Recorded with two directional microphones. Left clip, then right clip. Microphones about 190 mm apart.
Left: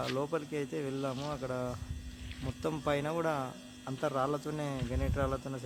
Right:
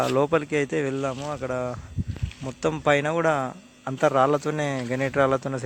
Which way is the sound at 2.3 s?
65° right (ahead or behind).